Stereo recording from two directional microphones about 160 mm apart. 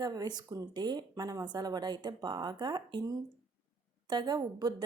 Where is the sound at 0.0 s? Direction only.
25° right (ahead or behind).